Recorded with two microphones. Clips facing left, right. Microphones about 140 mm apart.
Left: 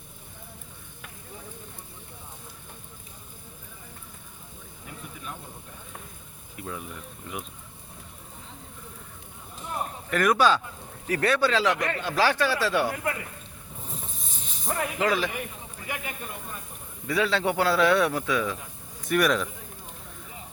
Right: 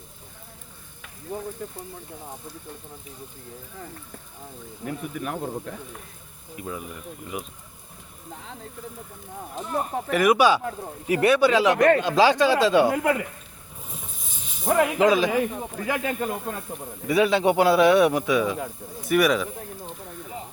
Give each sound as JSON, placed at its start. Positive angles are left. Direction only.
{"t": 4.9, "sound": "speech", "side_deg": -65}
{"t": 6.6, "sound": "speech", "side_deg": -5}
{"t": 10.1, "sound": "speech", "side_deg": -10}
{"t": 13.8, "sound": "a sound", "side_deg": 0}
{"t": 14.6, "sound": "speech", "side_deg": -75}
{"t": 14.9, "sound": "speech", "side_deg": -20}
{"t": 15.3, "sound": "speech", "side_deg": -80}
{"t": 17.1, "sound": "speech", "side_deg": -15}